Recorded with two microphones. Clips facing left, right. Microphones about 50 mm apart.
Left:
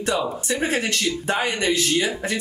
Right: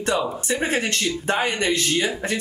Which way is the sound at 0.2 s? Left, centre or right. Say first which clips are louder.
Even; centre.